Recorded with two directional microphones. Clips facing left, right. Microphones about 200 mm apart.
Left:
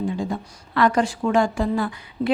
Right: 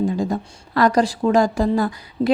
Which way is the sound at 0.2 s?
40° right (ahead or behind).